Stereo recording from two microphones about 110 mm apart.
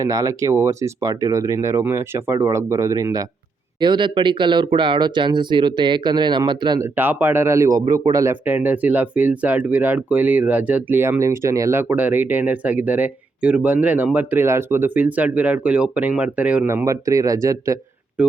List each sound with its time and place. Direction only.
0.0 s speech: 30° right (ahead or behind)
3.8 s speech: 45° right (ahead or behind)
6.7 s speech: 20° right (ahead or behind)
16.6 s speech: 25° right (ahead or behind)
18.2 s speech: 10° right (ahead or behind)